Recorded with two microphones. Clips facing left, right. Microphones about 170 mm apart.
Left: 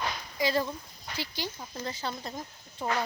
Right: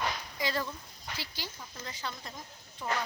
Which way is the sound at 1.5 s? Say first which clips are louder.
Left 7 dB; 35° left (ahead or behind).